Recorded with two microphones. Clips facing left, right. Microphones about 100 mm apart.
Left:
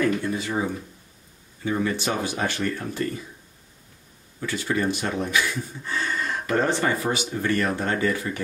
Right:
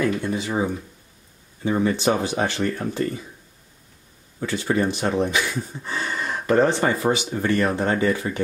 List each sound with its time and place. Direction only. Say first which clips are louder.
0.0 s a sound: right 1 dB; 25° right (ahead or behind)
1.6 s speech: right 4 dB; 25° right (ahead or behind)
4.4 s speech: right 3 dB; 30° right (ahead or behind)